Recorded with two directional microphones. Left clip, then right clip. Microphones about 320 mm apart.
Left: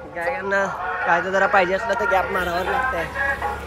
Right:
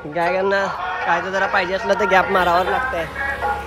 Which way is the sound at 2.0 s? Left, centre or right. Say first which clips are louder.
Right 8 dB; right.